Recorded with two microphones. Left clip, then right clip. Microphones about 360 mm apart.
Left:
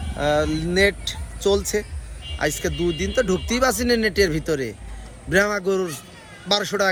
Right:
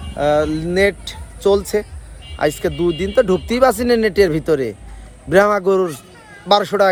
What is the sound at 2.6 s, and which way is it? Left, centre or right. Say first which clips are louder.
Speech: right 5 dB; centre.